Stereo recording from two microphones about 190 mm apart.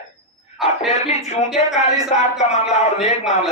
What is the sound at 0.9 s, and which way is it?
A man's voice, 35° left (ahead or behind).